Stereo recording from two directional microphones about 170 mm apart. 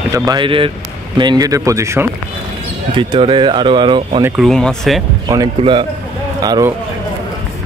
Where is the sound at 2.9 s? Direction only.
30° right (ahead or behind).